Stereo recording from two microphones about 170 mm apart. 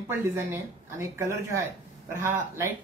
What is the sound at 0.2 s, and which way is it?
Speech, 15° right (ahead or behind).